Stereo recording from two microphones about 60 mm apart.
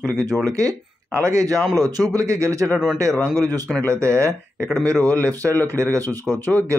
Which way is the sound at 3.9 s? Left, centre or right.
Right.